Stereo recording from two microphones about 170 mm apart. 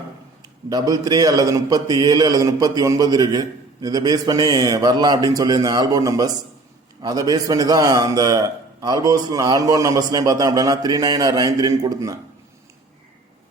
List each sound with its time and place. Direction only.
0.4 s a man's voice: 25° right (ahead or behind)